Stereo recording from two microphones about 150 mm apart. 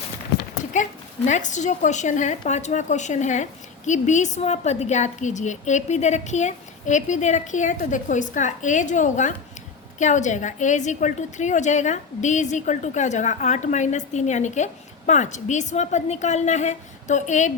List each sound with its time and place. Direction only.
0.7 s a woman's voice: 55° left (ahead or behind)